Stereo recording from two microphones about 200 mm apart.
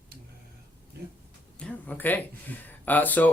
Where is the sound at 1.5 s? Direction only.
5° left (ahead or behind).